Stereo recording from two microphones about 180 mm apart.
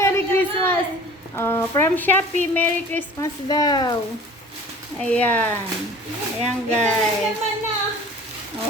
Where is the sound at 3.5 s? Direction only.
20° left (ahead or behind).